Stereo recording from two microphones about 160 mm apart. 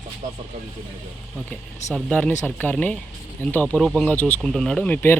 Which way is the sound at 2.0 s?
5° left (ahead or behind).